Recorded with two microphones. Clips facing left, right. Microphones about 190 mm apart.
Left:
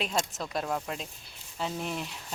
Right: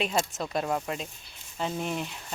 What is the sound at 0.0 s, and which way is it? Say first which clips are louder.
A woman's voice: right 3 dB; centre (ahead or behind).